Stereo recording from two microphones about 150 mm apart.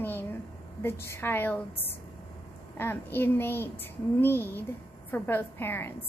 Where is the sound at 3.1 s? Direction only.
15° left (ahead or behind).